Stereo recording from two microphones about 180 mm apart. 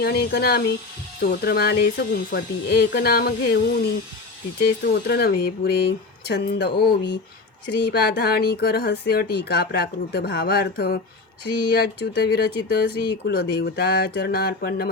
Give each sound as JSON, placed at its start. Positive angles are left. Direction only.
{"t": 0.0, "sound": "speech", "side_deg": 60}